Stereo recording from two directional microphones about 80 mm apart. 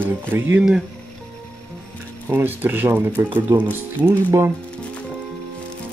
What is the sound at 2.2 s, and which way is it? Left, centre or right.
Speech, right.